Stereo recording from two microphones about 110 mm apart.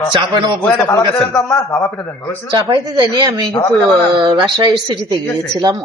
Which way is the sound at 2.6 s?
35° right (ahead or behind).